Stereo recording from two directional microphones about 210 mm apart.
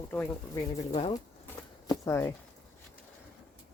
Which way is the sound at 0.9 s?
30° left (ahead or behind).